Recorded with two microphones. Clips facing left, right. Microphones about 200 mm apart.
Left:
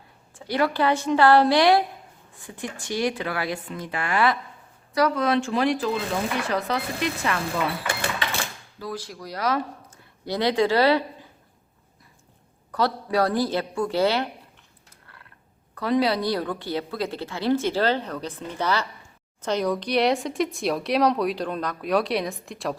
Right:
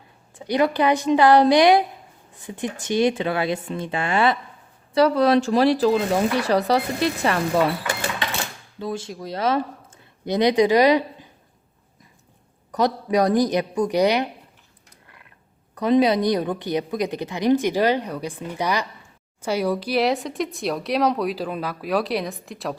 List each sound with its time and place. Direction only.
0.3 s speech: 20° right (ahead or behind); by 7.6 s 35° right (ahead or behind)
8.8 s speech: 25° right (ahead or behind)
12.7 s speech: 20° right (ahead or behind)
15.0 s a sound: 15° right (ahead or behind)
15.7 s speech: 20° right (ahead or behind); by 22.7 s centre (ahead or behind)